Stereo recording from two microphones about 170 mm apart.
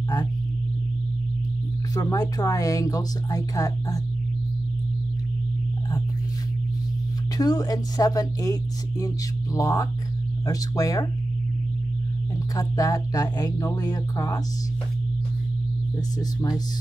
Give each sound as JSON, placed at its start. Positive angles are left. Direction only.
{"t": 2.0, "sound": "speech", "side_deg": 20}
{"t": 7.3, "sound": "speech", "side_deg": 20}
{"t": 12.5, "sound": "speech", "side_deg": 20}
{"t": 16.2, "sound": "speech", "side_deg": 25}